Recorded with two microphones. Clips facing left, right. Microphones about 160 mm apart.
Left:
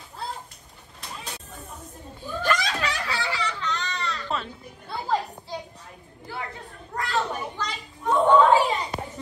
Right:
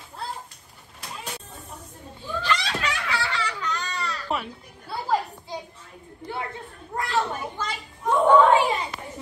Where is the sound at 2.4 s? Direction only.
45° left (ahead or behind).